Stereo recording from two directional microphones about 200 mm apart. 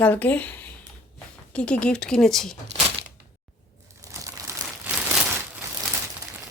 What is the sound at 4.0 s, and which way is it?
Crumpling, 15° right (ahead or behind).